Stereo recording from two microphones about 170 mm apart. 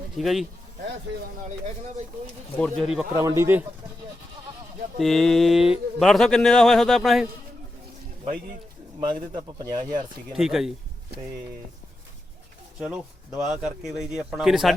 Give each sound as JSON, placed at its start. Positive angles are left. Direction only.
{"t": 0.2, "sound": "speech", "side_deg": 0}
{"t": 2.6, "sound": "speech", "side_deg": 0}
{"t": 3.2, "sound": "speech", "side_deg": -15}
{"t": 4.9, "sound": "speech", "side_deg": 0}
{"t": 9.0, "sound": "speech", "side_deg": -25}
{"t": 10.3, "sound": "speech", "side_deg": 0}
{"t": 12.8, "sound": "speech", "side_deg": -5}